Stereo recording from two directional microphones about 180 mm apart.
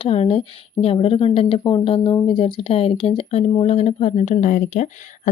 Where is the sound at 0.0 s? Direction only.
30° left (ahead or behind).